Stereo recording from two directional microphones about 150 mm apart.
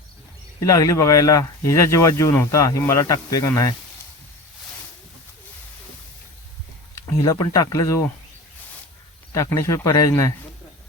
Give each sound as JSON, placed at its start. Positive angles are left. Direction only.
{"t": 0.6, "sound": "speech", "side_deg": 20}
{"t": 7.2, "sound": "speech", "side_deg": 25}
{"t": 9.3, "sound": "speech", "side_deg": 20}